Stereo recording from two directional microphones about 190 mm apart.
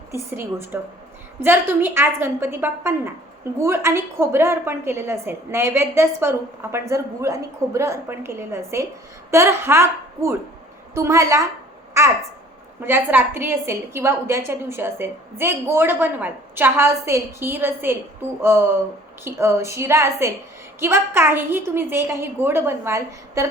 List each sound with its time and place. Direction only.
0.1 s a woman's voice: 10° right (ahead or behind)
10.9 s a woman's voice: 15° right (ahead or behind)
19.2 s a woman's voice: 15° right (ahead or behind)